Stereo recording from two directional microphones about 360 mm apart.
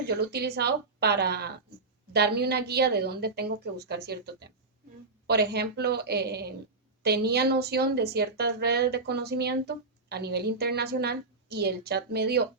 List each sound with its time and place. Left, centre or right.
0.0 s a woman's voice: right